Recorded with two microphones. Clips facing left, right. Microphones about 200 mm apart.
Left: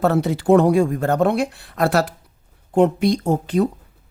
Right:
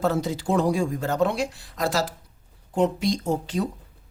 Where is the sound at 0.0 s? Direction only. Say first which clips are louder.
Left 6 dB; 65° left (ahead or behind).